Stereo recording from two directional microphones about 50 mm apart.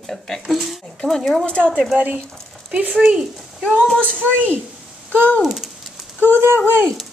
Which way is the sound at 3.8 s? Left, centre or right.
Left.